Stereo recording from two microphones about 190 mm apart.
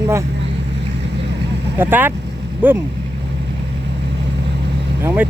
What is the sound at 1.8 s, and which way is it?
Speech, 10° right (ahead or behind).